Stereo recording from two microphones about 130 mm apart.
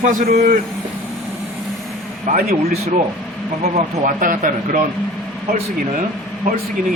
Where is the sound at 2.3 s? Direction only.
75° right (ahead or behind).